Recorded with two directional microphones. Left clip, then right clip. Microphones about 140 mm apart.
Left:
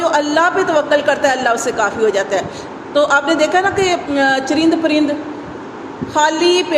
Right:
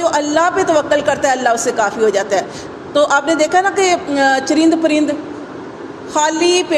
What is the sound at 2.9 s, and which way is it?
A woman's voice, 40° right (ahead or behind).